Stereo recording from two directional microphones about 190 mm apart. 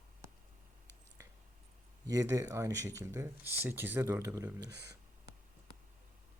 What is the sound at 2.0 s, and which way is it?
Speech, 20° right (ahead or behind).